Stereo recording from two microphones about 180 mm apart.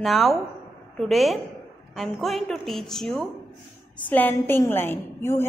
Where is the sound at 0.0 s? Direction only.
Centre (ahead or behind).